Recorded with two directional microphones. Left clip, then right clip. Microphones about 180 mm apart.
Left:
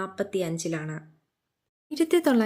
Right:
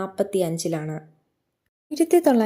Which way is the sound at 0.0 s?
15° right (ahead or behind).